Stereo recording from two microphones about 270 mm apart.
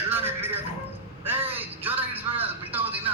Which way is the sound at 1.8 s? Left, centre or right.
Centre.